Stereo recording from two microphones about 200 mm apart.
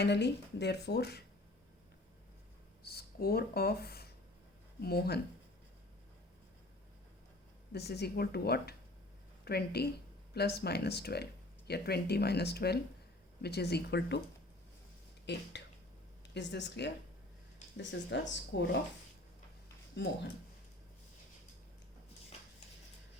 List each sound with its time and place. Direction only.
0.0 s speech: 60° left (ahead or behind)
2.8 s speech: 50° left (ahead or behind)
7.7 s speech: 55° left (ahead or behind)
15.3 s speech: 60° left (ahead or behind)
20.0 s speech: 60° left (ahead or behind)